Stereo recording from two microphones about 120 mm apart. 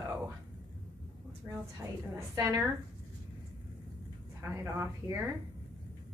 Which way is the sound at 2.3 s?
30° right (ahead or behind).